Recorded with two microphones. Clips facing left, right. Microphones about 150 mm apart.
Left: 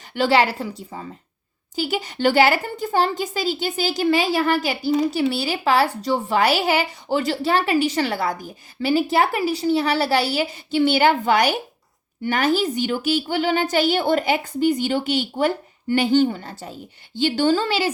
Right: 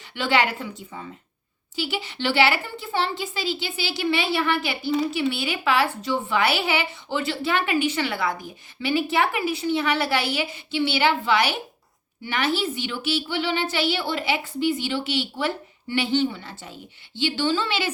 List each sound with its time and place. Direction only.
0.1 s a woman's voice: 40° left (ahead or behind)